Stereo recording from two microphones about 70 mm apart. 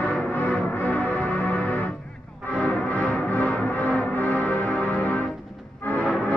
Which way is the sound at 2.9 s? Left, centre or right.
Centre.